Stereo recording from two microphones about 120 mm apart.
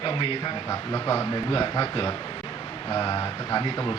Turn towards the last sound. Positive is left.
turn(degrees=35)  # may be behind; listen again after turning